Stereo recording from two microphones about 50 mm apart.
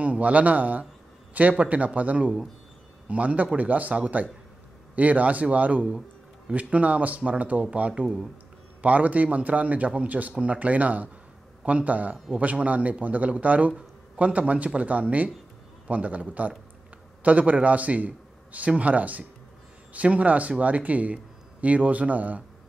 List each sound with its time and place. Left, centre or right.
0.0 s a man's voice: right